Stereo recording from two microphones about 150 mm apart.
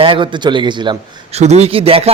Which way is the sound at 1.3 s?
45° right (ahead or behind).